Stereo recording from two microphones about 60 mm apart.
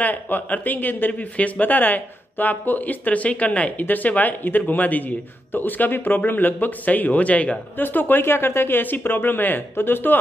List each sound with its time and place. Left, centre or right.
0.0 s speech: left